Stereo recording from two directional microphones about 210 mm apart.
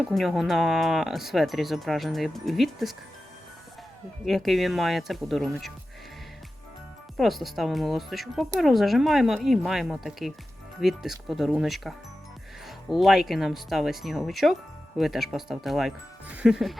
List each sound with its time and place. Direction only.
0.1 s speech: centre (ahead or behind)
4.3 s speech: centre (ahead or behind)
7.2 s speech: centre (ahead or behind)